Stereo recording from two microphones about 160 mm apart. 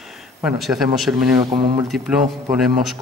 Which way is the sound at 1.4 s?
25° right (ahead or behind).